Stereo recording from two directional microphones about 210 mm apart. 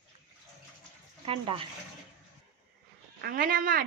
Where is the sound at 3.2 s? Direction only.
45° right (ahead or behind).